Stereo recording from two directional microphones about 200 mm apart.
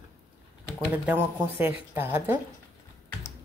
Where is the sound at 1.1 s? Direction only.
10° right (ahead or behind).